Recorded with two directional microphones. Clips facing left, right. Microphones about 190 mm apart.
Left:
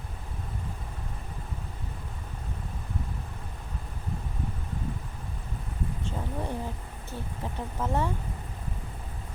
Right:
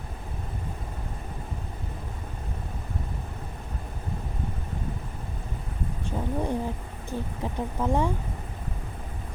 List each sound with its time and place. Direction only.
6.1 s speech: 15° right (ahead or behind)